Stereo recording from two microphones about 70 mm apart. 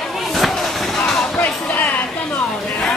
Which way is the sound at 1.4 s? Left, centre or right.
Left.